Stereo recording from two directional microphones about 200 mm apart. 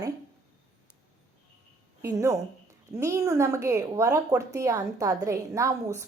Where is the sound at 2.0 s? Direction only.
15° right (ahead or behind).